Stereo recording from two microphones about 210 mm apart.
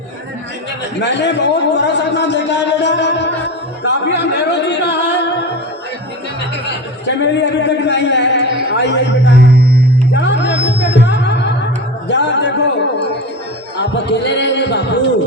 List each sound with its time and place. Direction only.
0.9 s a man's voice: 55° left (ahead or behind)
7.2 s speech: 55° left (ahead or behind)
10.2 s music: 55° left (ahead or behind)
13.7 s a sound: 55° left (ahead or behind)